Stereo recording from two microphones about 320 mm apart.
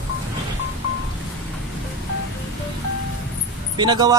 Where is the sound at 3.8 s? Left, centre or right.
Centre.